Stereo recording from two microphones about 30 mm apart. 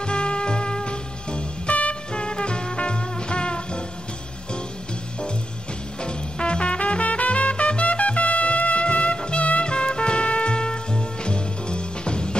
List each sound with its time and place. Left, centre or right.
0.0 s music: left
1.7 s music: left
2.1 s music: left
6.0 s music: left